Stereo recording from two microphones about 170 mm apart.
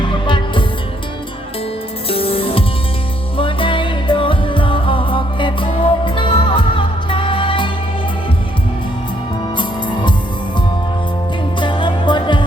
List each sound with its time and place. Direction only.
0.1 s music: 30° left (ahead or behind)
2.0 s music: 35° left (ahead or behind)
9.6 s music: 25° left (ahead or behind)
11.6 s music: 30° left (ahead or behind)